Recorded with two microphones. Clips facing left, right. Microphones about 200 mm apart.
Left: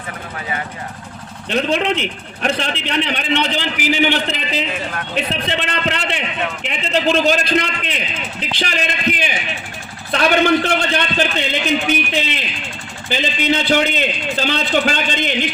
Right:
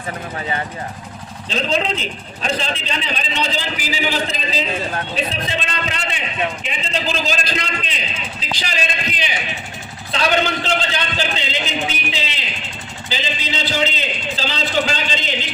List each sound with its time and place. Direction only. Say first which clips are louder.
1.5 s a man's voice: left 3 dB; 65° left (ahead or behind)